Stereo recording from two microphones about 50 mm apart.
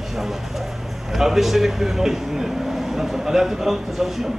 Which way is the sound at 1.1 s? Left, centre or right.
Centre.